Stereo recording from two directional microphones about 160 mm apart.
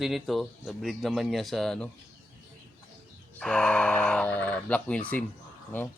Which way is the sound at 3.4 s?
5° left (ahead or behind).